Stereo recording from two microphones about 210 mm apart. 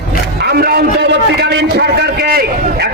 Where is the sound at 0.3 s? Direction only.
50° right (ahead or behind).